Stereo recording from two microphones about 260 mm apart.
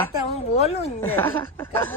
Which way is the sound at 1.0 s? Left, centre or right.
Centre.